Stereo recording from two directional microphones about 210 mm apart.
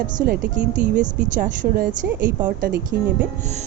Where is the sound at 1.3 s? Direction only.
40° right (ahead or behind).